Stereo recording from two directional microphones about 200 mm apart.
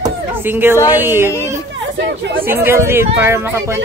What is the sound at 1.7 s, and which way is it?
Chatter, 65° right (ahead or behind).